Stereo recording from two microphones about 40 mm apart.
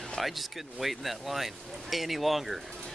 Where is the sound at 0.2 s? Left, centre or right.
Centre.